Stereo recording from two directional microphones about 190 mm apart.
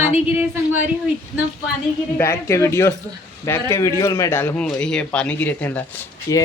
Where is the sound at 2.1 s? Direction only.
15° left (ahead or behind).